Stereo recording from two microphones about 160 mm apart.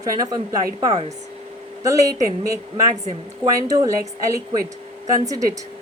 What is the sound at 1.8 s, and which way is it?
Speech, 20° right (ahead or behind).